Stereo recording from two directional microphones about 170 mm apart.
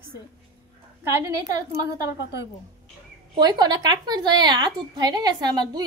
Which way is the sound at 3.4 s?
25° right (ahead or behind).